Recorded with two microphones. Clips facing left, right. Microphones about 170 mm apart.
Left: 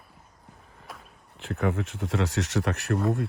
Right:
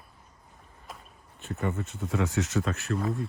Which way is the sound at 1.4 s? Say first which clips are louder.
Left 4 dB; 80° left.